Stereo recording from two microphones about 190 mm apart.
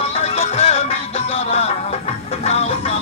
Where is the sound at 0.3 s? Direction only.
30° left (ahead or behind).